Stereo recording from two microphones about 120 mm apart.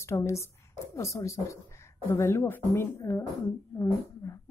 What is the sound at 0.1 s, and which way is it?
A woman's voice, 25° left (ahead or behind).